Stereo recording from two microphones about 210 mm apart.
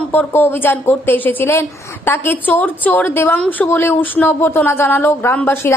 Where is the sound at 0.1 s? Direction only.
10° left (ahead or behind).